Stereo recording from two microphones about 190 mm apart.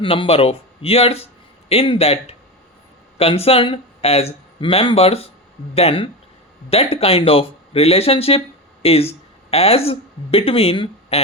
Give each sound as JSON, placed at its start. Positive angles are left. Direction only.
{"t": 0.0, "sound": "speech", "side_deg": 30}